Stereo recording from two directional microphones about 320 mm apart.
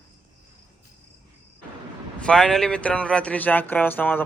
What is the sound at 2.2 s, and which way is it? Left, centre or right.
Speech, centre.